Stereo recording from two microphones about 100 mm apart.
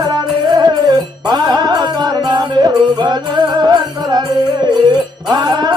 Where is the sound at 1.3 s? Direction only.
45° right (ahead or behind).